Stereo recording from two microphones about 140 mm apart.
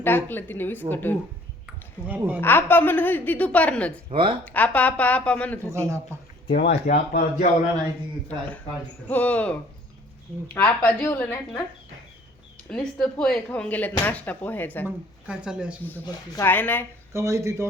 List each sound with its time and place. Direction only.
0.0 s a woman's voice: 15° left (ahead or behind)
1.6 s a sound: 10° right (ahead or behind)
2.4 s a woman's voice: 15° left (ahead or behind)
4.1 s speech: 40° right (ahead or behind)
4.4 s a woman's voice: 10° left (ahead or behind)
5.7 s speech: 20° right (ahead or behind)
6.5 s speech: 85° left
9.0 s a woman's voice: 10° left (ahead or behind)
12.6 s a woman's voice: 5° left (ahead or behind)
14.8 s speech: 5° right (ahead or behind)
15.8 s a woman's voice: 15° left (ahead or behind)
17.1 s speech: 20° right (ahead or behind)